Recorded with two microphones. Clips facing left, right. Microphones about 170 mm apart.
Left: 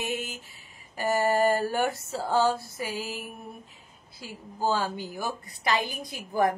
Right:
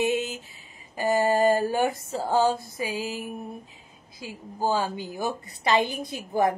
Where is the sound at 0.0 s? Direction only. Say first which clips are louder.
Right 7 dB; 20° right (ahead or behind).